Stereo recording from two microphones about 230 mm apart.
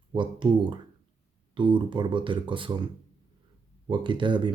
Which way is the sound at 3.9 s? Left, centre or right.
Centre.